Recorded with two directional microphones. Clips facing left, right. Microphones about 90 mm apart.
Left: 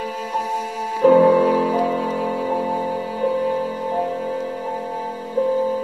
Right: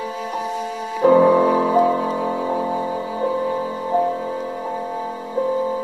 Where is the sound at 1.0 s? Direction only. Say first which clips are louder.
Even; 30° right (ahead or behind).